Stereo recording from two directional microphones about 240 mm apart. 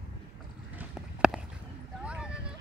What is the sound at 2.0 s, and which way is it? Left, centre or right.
Vehicle, centre.